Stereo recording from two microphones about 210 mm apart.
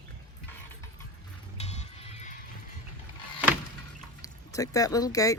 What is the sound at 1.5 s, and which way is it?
Music, 30° left (ahead or behind).